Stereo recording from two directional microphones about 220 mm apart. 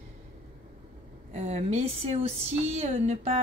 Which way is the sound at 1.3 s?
30° right (ahead or behind).